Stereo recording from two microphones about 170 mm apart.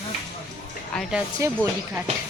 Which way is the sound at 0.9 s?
5° left (ahead or behind).